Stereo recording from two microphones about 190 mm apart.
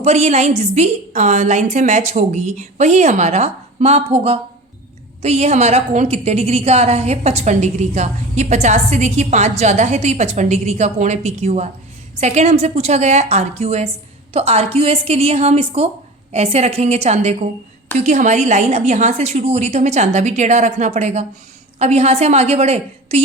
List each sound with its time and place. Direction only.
0.0 s a woman's voice: 35° right (ahead or behind)